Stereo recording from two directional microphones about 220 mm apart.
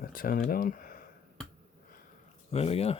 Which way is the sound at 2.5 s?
25° left (ahead or behind).